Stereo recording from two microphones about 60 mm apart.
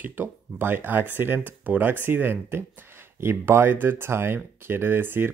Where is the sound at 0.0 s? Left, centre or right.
Right.